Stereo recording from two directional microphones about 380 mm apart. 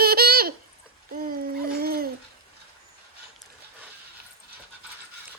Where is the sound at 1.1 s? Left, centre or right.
Right.